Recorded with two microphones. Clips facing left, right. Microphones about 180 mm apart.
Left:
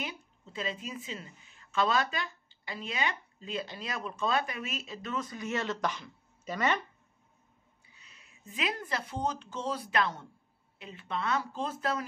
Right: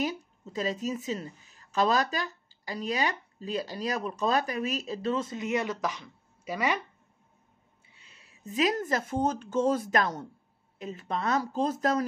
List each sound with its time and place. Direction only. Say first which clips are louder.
0.0 s speech: right 9 dB; 40° right (ahead or behind); by 5.8 s 15° right (ahead or behind)
5.8 s speech: right 1 dB; centre (ahead or behind)
7.9 s speech: right 1 dB; 30° right (ahead or behind)